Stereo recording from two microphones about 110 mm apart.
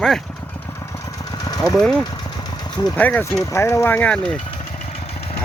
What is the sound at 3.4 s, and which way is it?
Speech, 25° left (ahead or behind).